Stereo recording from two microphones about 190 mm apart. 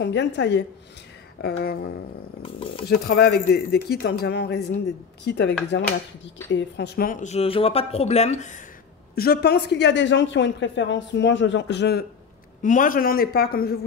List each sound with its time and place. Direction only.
0.0 s speech: 65° left (ahead or behind)
1.4 s speech: 55° left (ahead or behind)
2.4 s speech: 25° left (ahead or behind)
2.9 s a woman's voice: 55° left (ahead or behind)
9.1 s a woman's voice: 55° left (ahead or behind)
12.6 s a man's voice: 45° left (ahead or behind)